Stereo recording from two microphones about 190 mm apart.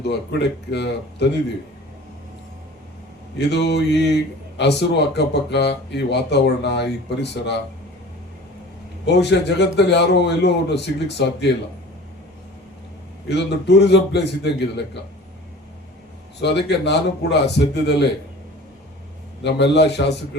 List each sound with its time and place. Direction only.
0.0 s a man's voice: 60° left (ahead or behind)
3.3 s a man's voice: 65° left (ahead or behind)
9.0 s a man's voice: 60° left (ahead or behind)
13.2 s a man's voice: 65° left (ahead or behind)
16.4 s a man's voice: 60° left (ahead or behind)
19.4 s a man's voice: 65° left (ahead or behind)